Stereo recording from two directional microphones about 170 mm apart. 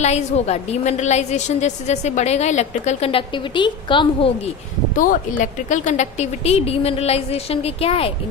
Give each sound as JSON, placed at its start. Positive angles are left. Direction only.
{"t": 0.0, "sound": "a woman's voice", "side_deg": 40}
{"t": 4.9, "sound": "a woman's voice", "side_deg": 50}